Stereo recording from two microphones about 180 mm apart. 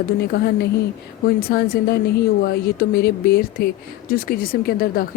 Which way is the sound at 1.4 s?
55° left (ahead or behind).